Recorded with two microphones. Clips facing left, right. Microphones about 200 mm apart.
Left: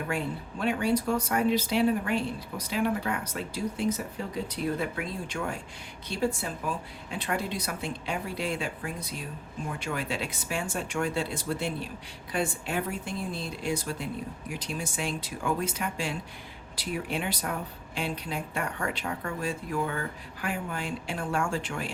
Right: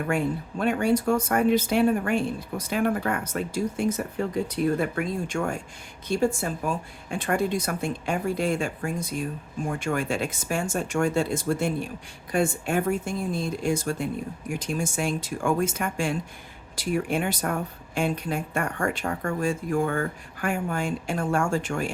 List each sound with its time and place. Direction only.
0.6 s speech: 50° right (ahead or behind)